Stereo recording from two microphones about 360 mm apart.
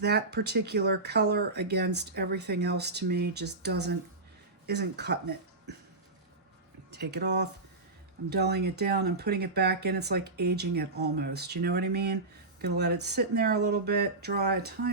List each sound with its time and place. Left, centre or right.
0.0 s speech: right
6.9 s speech: right